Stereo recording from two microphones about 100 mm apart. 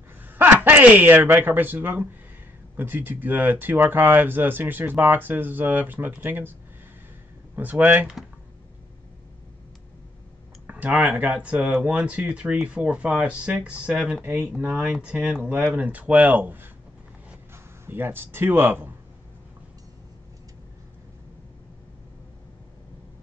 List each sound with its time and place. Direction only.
0.4 s speech: 20° right (ahead or behind)
7.5 s speech: 15° right (ahead or behind)
10.7 s speech: 15° right (ahead or behind)
17.8 s speech: 20° right (ahead or behind)